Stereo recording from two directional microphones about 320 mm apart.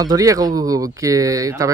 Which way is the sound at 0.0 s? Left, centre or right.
Centre.